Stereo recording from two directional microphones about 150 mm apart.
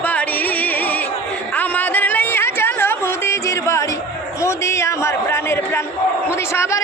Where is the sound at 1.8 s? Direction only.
10° left (ahead or behind).